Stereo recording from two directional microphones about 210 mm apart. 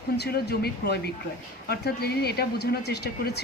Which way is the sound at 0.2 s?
50° left (ahead or behind).